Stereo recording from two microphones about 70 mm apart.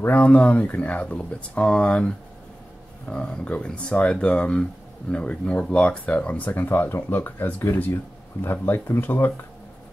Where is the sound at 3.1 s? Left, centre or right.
Centre; by 9.4 s left.